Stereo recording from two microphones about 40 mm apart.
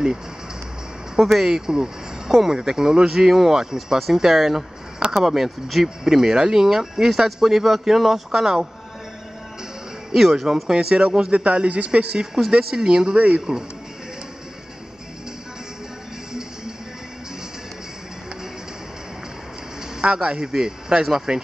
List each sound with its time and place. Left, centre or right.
1.1 s speech: centre
10.1 s a man's voice: centre
20.0 s speech: right